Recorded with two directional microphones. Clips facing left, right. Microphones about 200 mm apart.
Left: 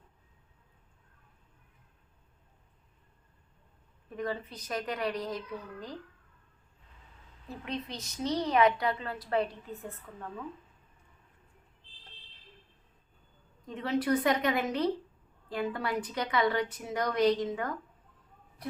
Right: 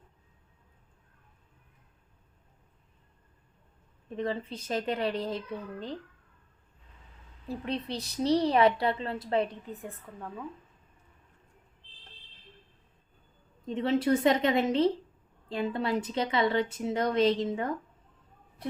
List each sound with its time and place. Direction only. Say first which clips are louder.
4.1 s a woman's voice: right 3 dB; 25° right (ahead or behind)
7.4 s a woman's voice: right 4 dB; 35° right (ahead or behind); by 10.4 s 15° right (ahead or behind)
13.7 s a woman's voice: right 3 dB; 25° right (ahead or behind)